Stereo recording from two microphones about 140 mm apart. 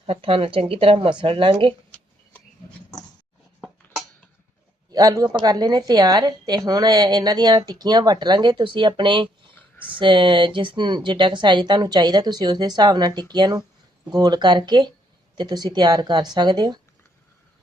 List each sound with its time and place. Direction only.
0.0 s speech: 40° right (ahead or behind)
4.9 s speech: 25° right (ahead or behind)